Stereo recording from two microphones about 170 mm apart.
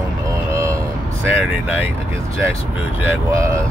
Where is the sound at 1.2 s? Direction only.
10° right (ahead or behind).